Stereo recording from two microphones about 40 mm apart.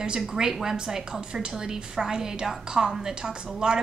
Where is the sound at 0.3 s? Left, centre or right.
Centre.